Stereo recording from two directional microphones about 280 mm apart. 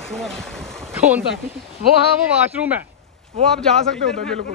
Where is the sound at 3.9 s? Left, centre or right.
Right.